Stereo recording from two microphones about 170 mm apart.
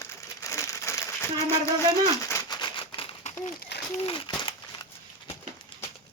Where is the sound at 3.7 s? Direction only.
85° left.